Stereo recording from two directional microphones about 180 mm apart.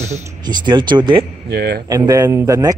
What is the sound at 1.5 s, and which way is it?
Speech, 60° right (ahead or behind).